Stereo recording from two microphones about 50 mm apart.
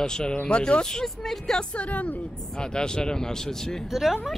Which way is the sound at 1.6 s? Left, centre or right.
Left.